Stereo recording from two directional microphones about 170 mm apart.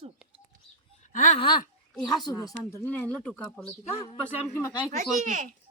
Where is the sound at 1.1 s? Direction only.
45° left (ahead or behind).